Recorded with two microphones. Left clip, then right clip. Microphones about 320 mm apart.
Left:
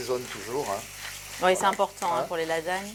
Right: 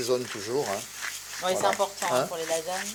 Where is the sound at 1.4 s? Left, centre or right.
Left.